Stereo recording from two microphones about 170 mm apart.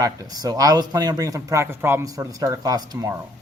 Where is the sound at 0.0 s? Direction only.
20° right (ahead or behind).